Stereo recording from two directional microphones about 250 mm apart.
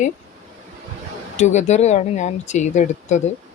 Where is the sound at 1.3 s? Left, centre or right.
Left.